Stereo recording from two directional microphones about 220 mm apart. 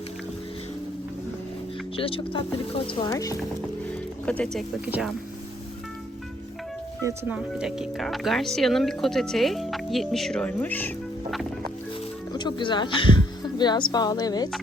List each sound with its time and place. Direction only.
2.0 s speech: 25° left (ahead or behind)
4.5 s speech: 5° right (ahead or behind)
7.0 s speech: 10° right (ahead or behind)
12.3 s speech: 20° left (ahead or behind)